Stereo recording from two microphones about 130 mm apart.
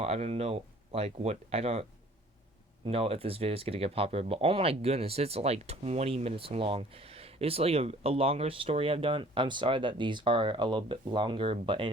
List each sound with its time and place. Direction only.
0.0 s speech: 55° right (ahead or behind)
2.8 s speech: 50° right (ahead or behind)